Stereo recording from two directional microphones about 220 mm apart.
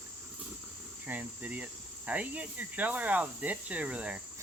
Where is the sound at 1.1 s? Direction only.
5° right (ahead or behind).